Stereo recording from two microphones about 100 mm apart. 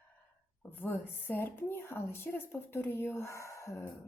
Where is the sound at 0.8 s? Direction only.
20° left (ahead or behind).